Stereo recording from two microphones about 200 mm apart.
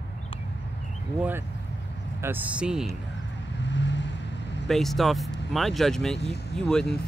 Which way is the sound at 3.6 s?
60° left (ahead or behind).